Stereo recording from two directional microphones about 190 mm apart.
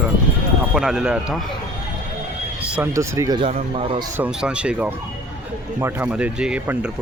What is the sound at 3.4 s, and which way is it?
Speech, 30° right (ahead or behind).